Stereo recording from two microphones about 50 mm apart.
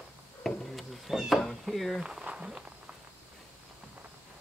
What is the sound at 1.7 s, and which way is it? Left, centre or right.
Speech, centre.